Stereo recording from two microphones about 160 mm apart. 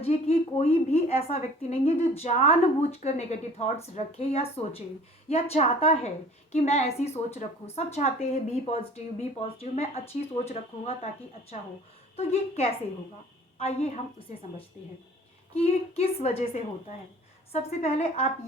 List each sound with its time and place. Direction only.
0.0 s a woman's voice: 40° left (ahead or behind)
12.1 s a woman's voice: 40° left (ahead or behind)
15.5 s a woman's voice: 40° left (ahead or behind)